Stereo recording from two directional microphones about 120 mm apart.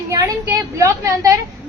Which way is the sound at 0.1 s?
25° right (ahead or behind).